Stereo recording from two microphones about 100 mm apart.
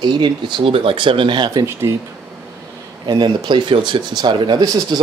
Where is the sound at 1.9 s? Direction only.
30° right (ahead or behind).